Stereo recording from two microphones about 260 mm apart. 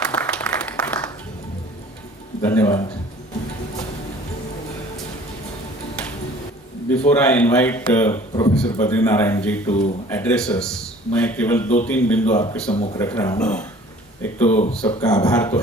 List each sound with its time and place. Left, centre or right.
0.0 s applause: centre
2.4 s a man's voice: centre
6.9 s a man's voice: centre
14.5 s a man's voice: left